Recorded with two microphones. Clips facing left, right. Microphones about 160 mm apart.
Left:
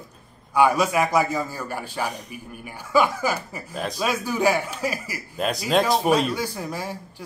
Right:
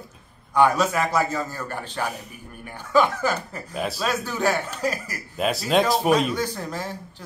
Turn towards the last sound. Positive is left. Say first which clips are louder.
# even
turn(degrees=10)  # may be behind; listen again after turning